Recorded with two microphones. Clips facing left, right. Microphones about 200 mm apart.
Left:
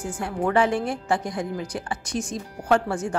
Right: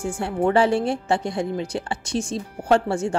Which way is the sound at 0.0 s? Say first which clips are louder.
Right 4 dB; 25° right (ahead or behind).